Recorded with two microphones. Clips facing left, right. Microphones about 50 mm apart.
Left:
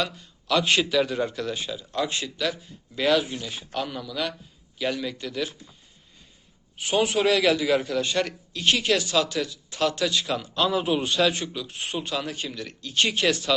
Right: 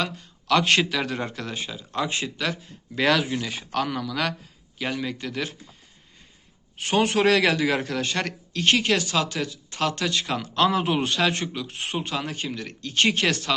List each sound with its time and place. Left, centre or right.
0.0 s a man's voice: right
1.2 s a man's voice: right
2.5 s speech: right
3.1 s a man's voice: right
4.8 s a man's voice: right
6.7 s a man's voice: right
10.4 s a man's voice: right